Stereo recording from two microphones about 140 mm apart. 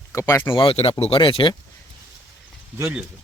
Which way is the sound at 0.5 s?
40° left (ahead or behind).